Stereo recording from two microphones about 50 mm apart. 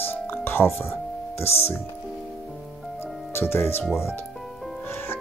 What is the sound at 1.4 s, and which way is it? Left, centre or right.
Speech, left.